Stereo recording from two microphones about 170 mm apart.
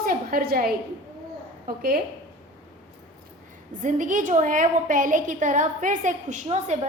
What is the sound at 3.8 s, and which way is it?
A woman's voice, 50° right (ahead or behind).